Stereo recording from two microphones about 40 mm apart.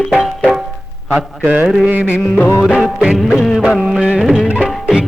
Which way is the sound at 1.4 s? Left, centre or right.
Right.